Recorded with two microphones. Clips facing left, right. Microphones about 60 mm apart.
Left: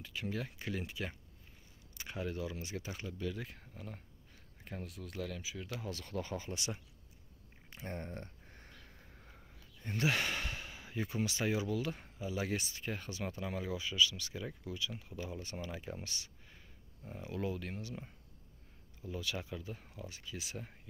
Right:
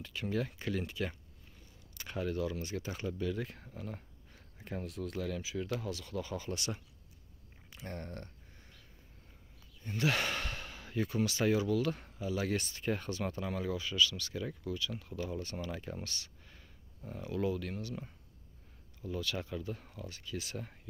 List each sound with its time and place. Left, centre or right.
0.0 s speech: centre
5.9 s speech: left; by 8.3 s centre
8.5 s a sound: left
10.0 s speech: centre
19.0 s speech: centre